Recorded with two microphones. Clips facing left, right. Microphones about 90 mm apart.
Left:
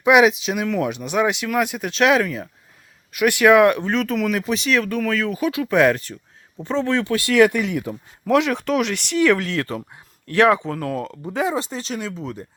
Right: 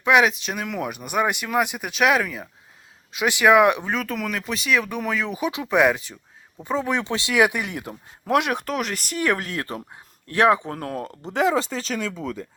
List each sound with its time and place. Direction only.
0.0 s speech: 10° left (ahead or behind)
3.1 s speech: 15° right (ahead or behind)
4.0 s speech: centre (ahead or behind)
4.8 s speech: 15° right (ahead or behind)
7.9 s speech: 60° right (ahead or behind)
8.6 s speech: 40° right (ahead or behind)
9.6 s speech: 25° right (ahead or behind)
10.7 s speech: 40° right (ahead or behind)
11.7 s speech: 90° right